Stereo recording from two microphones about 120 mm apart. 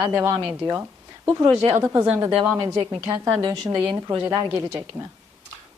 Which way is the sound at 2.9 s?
20° right (ahead or behind).